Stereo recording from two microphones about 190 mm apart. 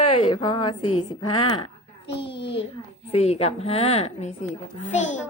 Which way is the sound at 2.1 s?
30° left (ahead or behind).